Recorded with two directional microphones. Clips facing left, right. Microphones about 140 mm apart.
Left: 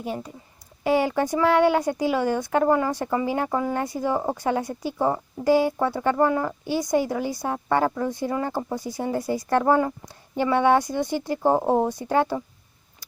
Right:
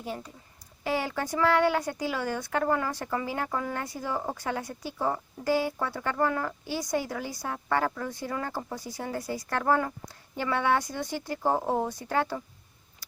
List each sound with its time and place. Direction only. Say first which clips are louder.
0.0 s speech: left 6 dB; 20° left (ahead or behind)